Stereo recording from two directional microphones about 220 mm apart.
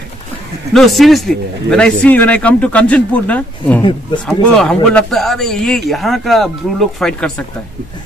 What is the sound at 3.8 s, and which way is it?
Speech, 20° left (ahead or behind).